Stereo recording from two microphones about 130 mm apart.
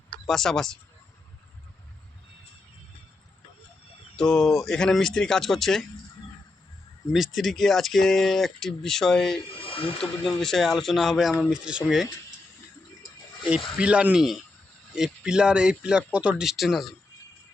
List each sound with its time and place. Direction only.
0.3 s speech: 5° left (ahead or behind)
4.2 s speech: 5° left (ahead or behind)
7.1 s speech: centre (ahead or behind)
9.5 s speech: 45° left (ahead or behind)
10.0 s speech: 5° left (ahead or behind)
13.7 s speech: 10° right (ahead or behind)